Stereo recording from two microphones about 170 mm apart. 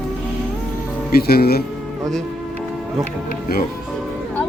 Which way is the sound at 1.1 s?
65° left (ahead or behind).